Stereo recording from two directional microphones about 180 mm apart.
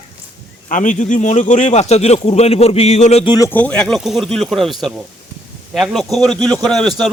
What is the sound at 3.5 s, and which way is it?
A man's voice, 10° left (ahead or behind).